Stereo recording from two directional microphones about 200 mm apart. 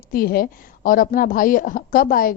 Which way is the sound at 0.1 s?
50° left (ahead or behind).